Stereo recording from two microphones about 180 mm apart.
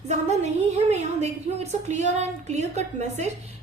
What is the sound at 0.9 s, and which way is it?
A woman's voice, 35° right (ahead or behind).